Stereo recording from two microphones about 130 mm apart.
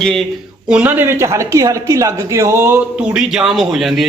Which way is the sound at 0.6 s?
10° right (ahead or behind).